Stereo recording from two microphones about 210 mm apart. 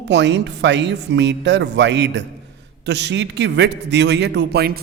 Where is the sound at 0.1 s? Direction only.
55° right (ahead or behind).